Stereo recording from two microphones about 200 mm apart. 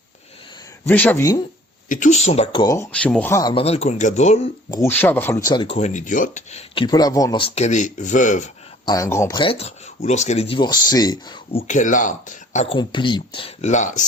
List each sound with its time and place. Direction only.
0.9 s speech: 10° left (ahead or behind)
1.9 s speech: 40° left (ahead or behind); by 3.5 s 15° left (ahead or behind)
3.5 s speech: 30° left (ahead or behind)
4.7 s speech: 10° left (ahead or behind); by 6.8 s 30° left (ahead or behind)
6.8 s speech: 20° left (ahead or behind); by 8.4 s 40° left (ahead or behind)
8.9 s speech: 15° left (ahead or behind)
11.7 s speech: 40° left (ahead or behind)